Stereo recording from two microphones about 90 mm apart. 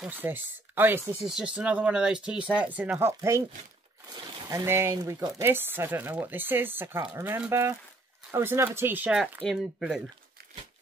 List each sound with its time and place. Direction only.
0.0 s speech: 20° right (ahead or behind)
1.2 s speech: 10° right (ahead or behind)
3.1 s speech: 35° right (ahead or behind)
4.5 s speech: 35° right (ahead or behind)
4.9 s speech: 45° right (ahead or behind)
5.4 s speech: 25° right (ahead or behind)
9.2 s speech: centre (ahead or behind)